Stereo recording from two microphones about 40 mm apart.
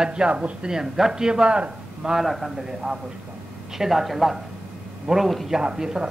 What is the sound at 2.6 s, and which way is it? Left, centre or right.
A man's voice, centre.